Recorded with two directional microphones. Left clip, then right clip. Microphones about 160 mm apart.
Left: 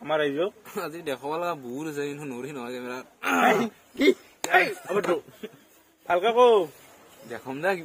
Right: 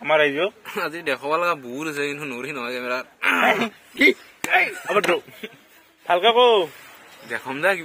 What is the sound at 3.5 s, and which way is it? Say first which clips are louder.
Speech: right 6 dB; 10° right (ahead or behind).